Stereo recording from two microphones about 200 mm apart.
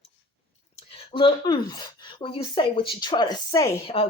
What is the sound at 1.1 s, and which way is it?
Speech, 25° left (ahead or behind).